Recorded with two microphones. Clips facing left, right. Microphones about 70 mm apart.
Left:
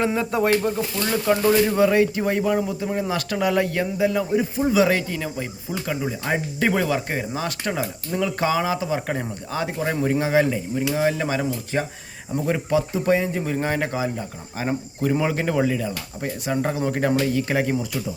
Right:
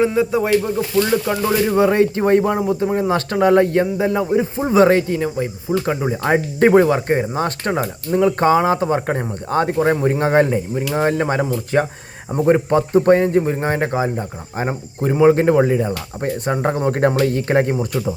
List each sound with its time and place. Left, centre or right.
0.2 s speech: centre; by 5.0 s right
5.1 s speech: right
5.8 s speech: right
6.7 s speech: right
9.0 s speech: right
9.5 s speech: right
13.4 s speech: right